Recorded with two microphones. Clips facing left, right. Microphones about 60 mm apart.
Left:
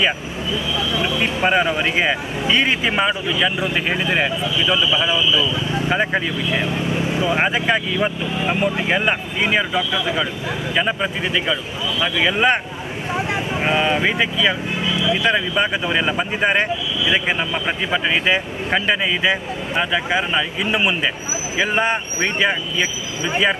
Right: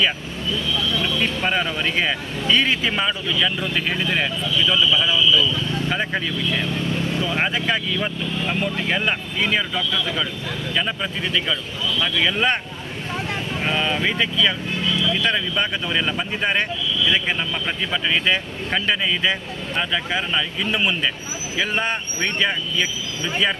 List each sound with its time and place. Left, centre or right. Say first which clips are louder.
0.5 s speech: left 1 dB; centre